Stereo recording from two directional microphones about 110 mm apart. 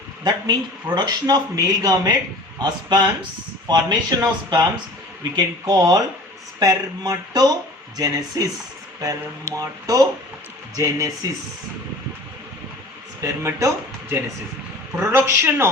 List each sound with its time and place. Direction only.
0.3 s speech: 40° right (ahead or behind)
13.2 s a man's voice: 30° right (ahead or behind)
14.9 s a man's voice: 20° right (ahead or behind)